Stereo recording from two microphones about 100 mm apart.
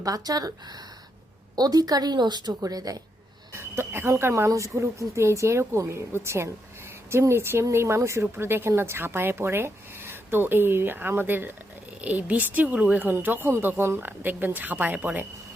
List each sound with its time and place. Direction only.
0.0 s a woman's voice: 40° right (ahead or behind)
3.5 s a woman's voice: 25° right (ahead or behind)